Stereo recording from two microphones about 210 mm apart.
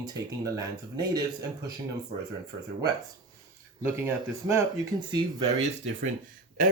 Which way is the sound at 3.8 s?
10° right (ahead or behind).